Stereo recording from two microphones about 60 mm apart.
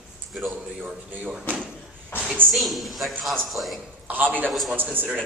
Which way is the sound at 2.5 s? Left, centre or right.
Centre.